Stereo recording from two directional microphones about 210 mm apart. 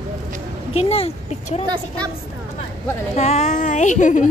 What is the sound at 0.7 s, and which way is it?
Speech, 30° left (ahead or behind).